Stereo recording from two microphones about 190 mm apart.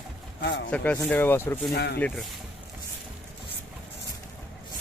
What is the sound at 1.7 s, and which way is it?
Speech, 60° left (ahead or behind).